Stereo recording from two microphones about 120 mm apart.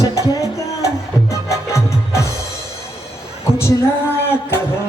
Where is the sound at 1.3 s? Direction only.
25° left (ahead or behind).